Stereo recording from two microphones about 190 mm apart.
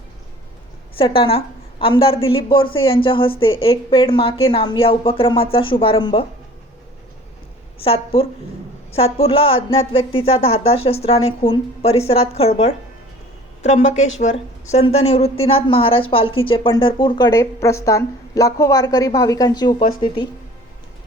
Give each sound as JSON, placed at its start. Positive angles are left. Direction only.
{"t": 0.9, "sound": "speech", "side_deg": 30}
{"t": 7.9, "sound": "a woman's voice", "side_deg": 30}